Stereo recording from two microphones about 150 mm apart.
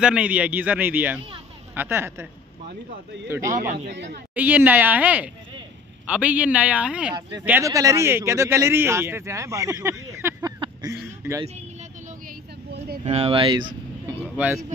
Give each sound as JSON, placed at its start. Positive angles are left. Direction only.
{"t": 0.0, "sound": "a man's voice", "side_deg": -5}
{"t": 3.3, "sound": "a man's voice", "side_deg": -20}
{"t": 12.7, "sound": "a sound", "side_deg": -90}
{"t": 13.0, "sound": "speech", "side_deg": -45}
{"t": 14.2, "sound": "speech", "side_deg": -10}